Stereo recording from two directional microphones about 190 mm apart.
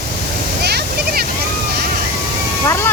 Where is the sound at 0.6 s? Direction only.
60° right (ahead or behind).